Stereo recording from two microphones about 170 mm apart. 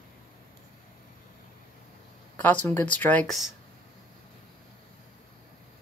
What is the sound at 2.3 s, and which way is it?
Speech, 10° left (ahead or behind).